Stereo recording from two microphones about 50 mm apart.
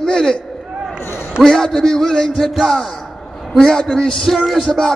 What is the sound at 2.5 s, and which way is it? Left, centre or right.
Speech, centre.